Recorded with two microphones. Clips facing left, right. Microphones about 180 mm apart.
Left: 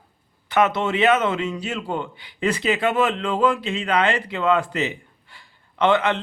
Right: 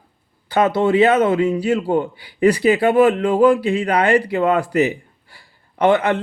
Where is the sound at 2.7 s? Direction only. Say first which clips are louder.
Right 6 dB; 35° right (ahead or behind).